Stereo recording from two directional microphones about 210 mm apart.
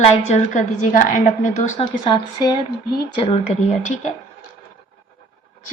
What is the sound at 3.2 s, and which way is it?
Speech, 25° left (ahead or behind).